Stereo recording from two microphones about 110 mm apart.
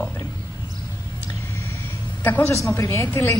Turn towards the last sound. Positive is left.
turn(degrees=25)  # may be behind; listen again after turning